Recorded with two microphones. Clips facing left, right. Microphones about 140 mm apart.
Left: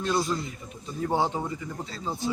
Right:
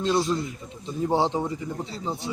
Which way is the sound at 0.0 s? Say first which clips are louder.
Right 3 dB; 20° right (ahead or behind).